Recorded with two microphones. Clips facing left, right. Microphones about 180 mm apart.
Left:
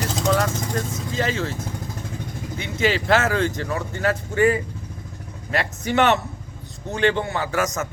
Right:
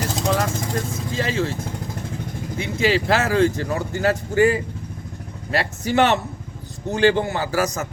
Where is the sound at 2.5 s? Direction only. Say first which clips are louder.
Right 2 dB; 30° right (ahead or behind).